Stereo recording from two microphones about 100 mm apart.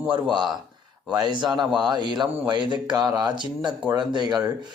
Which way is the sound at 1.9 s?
45° right (ahead or behind).